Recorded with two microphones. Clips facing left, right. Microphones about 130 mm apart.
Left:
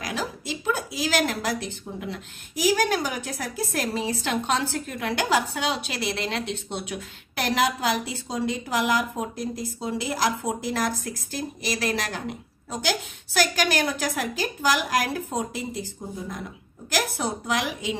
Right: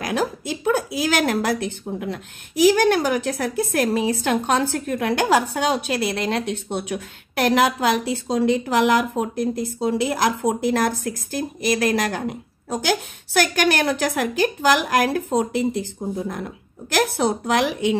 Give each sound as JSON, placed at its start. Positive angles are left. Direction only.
{"t": 0.0, "sound": "a woman's voice", "side_deg": -50}
{"t": 16.9, "sound": "a woman's voice", "side_deg": -65}